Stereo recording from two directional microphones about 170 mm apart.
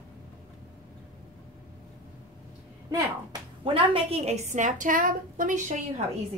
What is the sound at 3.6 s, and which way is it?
A woman's voice, 35° right (ahead or behind).